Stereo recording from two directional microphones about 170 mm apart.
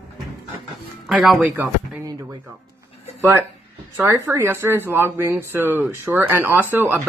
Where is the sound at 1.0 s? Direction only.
5° right (ahead or behind).